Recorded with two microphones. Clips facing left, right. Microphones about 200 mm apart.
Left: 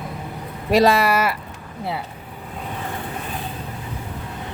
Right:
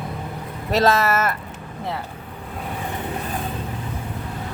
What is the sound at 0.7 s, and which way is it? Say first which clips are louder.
Speech: left 2 dB; 15° left (ahead or behind).